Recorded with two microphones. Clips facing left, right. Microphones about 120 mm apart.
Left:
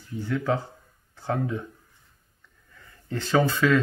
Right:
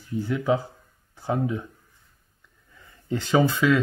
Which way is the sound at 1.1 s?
10° right (ahead or behind).